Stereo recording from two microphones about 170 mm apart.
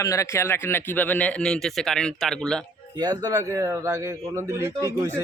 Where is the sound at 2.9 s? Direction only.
20° right (ahead or behind).